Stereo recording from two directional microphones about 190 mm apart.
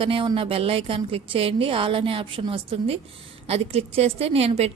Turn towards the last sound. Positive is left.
turn(degrees=-30)  # may be behind; listen again after turning